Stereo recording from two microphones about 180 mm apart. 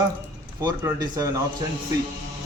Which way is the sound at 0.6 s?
20° right (ahead or behind).